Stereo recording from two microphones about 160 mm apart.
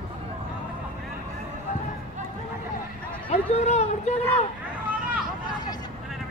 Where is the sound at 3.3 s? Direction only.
45° left (ahead or behind).